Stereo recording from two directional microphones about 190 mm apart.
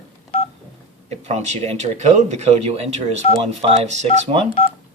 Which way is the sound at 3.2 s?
35° left (ahead or behind).